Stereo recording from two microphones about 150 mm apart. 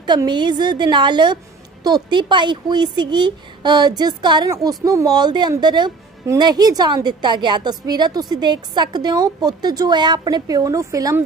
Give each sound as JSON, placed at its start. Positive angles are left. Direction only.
{"t": 0.0, "sound": "speech", "side_deg": -30}